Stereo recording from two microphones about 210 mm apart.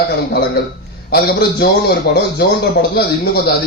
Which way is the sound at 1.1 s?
50° left (ahead or behind).